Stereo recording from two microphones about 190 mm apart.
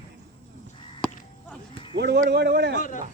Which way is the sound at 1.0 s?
5° left (ahead or behind).